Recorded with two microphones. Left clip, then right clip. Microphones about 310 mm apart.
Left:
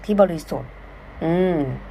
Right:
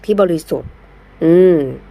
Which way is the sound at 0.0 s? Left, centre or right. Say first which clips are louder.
Right 4 dB; centre.